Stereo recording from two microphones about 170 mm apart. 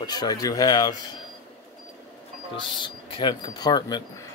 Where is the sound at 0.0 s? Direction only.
25° left (ahead or behind).